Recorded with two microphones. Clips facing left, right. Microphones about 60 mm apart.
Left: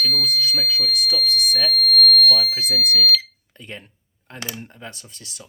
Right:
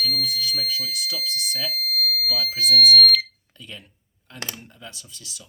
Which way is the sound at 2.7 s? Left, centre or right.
Left.